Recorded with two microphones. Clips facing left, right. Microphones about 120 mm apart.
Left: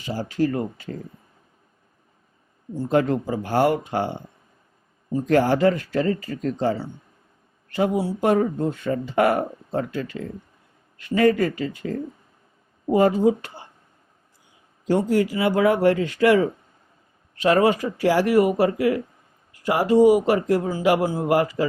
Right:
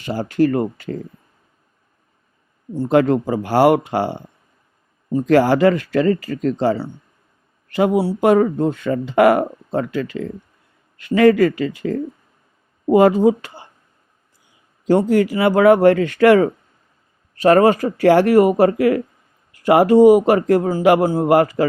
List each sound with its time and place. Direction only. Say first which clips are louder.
0.0 s speech: right 6 dB; 65° right (ahead or behind)
2.7 s speech: right 6 dB; 90° right
14.8 s speech: right 5 dB; 65° right (ahead or behind)
17.3 s speech: right 6 dB; 45° right (ahead or behind)
18.7 s speech: right 5 dB; 60° right (ahead or behind)